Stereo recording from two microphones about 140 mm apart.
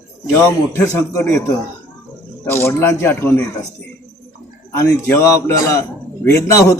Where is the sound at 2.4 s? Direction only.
20° left (ahead or behind).